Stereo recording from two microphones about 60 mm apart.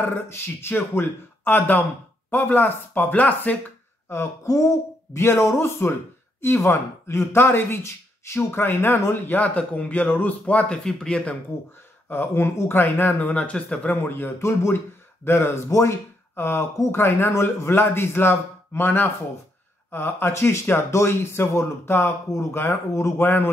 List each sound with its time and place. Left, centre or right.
0.0 s speech: left
4.1 s speech: left
10.8 s speech: centre
12.1 s speech: left
13.2 s speech: left
14.0 s speech: left
15.7 s speech: left
16.3 s speech: left
20.3 s speech: left
23.2 s speech: left